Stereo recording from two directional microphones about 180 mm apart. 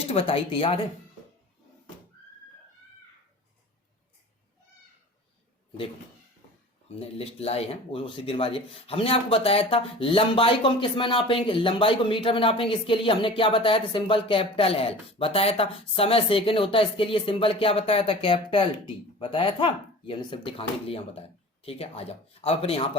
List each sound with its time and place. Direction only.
0.1 s speech: 30° left (ahead or behind)
6.8 s speech: 35° left (ahead or behind)